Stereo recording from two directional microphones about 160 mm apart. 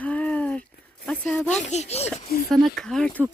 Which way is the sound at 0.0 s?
10° left (ahead or behind).